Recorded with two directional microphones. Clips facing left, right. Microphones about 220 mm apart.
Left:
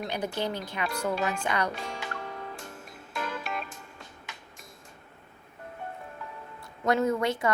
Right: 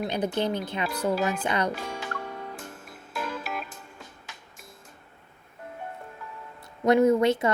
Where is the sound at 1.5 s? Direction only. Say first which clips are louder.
Right 2 dB; 20° right (ahead or behind).